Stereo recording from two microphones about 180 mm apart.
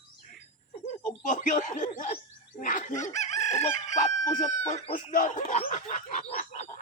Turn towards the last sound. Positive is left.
turn(degrees=45)  # may be behind; listen again after turning